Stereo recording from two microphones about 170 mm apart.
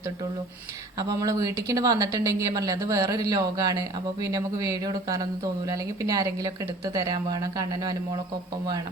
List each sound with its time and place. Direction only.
0.9 s speech: 20° right (ahead or behind)